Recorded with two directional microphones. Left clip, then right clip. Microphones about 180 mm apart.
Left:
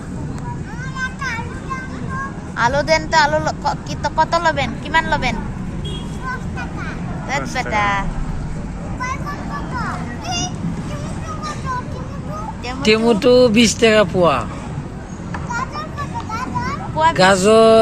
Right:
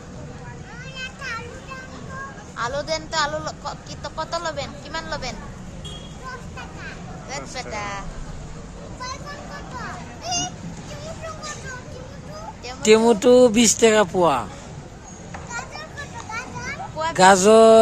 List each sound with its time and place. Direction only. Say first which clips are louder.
2.6 s a woman's voice: left 11 dB; 20° right (ahead or behind)
3.2 s speech: left 8 dB; centre (ahead or behind)
3.6 s speech: left 11 dB; 20° right (ahead or behind)
7.5 s speech: left 10 dB; 10° right (ahead or behind)
7.8 s speech: left 14 dB; 5° left (ahead or behind)
12.8 s speech: left 1 dB; 30° right (ahead or behind)
17.2 s speech: right 1 dB; 30° right (ahead or behind)